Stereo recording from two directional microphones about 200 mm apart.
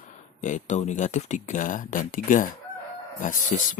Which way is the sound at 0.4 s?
35° left (ahead or behind).